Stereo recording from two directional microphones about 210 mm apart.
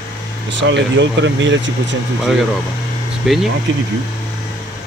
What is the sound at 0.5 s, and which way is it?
Speech, 60° right (ahead or behind).